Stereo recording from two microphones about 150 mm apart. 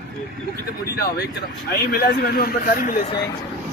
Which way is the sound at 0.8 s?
90° left.